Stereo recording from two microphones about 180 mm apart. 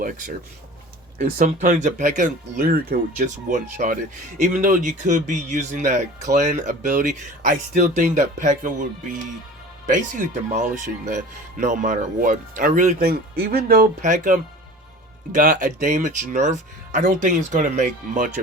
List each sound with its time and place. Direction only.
0.0 s speech: 45° right (ahead or behind)
3.5 s speech: 45° right (ahead or behind)
9.9 s speech: 45° right (ahead or behind)